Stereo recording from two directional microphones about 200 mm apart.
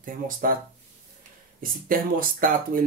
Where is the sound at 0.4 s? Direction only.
45° right (ahead or behind).